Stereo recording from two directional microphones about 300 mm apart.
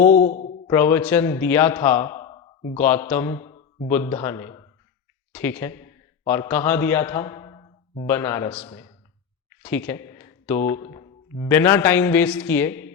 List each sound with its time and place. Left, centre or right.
0.1 s speech: left
0.7 s speech: centre
2.7 s a man's voice: centre
9.6 s a sound: centre
11.4 s a man's voice: centre